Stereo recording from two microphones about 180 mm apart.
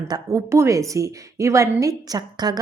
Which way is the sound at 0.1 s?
15° right (ahead or behind).